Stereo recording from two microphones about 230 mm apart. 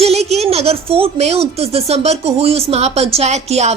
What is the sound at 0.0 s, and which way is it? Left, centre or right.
Speech, right.